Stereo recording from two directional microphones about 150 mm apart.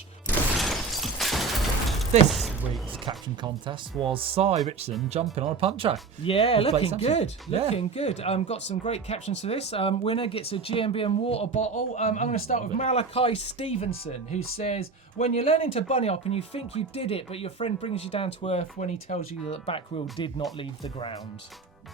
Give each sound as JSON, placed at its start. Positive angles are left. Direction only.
{"t": 0.6, "sound": "a sound", "side_deg": 0}
{"t": 3.1, "sound": "speech", "side_deg": -30}
{"t": 6.2, "sound": "a man's voice", "side_deg": 40}
{"t": 11.5, "sound": "a man's voice", "side_deg": 55}